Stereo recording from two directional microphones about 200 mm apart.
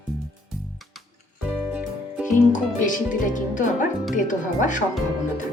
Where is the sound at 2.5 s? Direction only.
40° left (ahead or behind).